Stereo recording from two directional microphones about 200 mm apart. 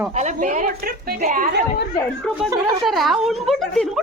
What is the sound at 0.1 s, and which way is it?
A woman's voice, 35° right (ahead or behind).